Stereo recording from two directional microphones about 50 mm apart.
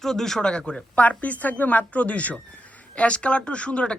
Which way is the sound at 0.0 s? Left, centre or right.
Centre.